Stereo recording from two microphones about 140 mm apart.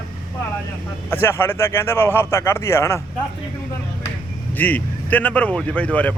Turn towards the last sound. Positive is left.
turn(degrees=10)  # may be behind; listen again after turning